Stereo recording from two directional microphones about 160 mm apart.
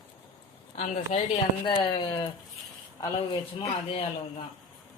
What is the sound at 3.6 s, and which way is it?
Speech, 35° left (ahead or behind).